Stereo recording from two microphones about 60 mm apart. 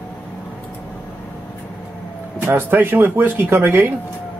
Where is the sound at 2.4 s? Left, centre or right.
Right.